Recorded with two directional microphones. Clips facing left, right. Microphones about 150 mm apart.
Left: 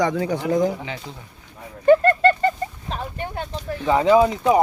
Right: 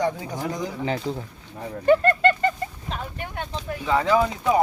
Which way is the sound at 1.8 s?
35° left (ahead or behind).